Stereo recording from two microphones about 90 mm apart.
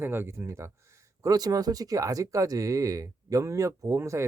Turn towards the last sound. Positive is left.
turn(degrees=-30)  # may be behind; listen again after turning